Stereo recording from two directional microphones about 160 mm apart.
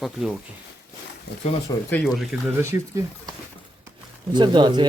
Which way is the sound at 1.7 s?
20° left (ahead or behind).